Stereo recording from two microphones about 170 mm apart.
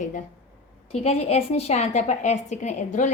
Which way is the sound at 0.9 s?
35° left (ahead or behind).